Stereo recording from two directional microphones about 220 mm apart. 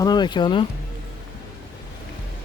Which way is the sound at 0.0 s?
20° left (ahead or behind).